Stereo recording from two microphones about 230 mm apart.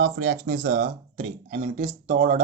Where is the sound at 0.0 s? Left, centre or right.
Right.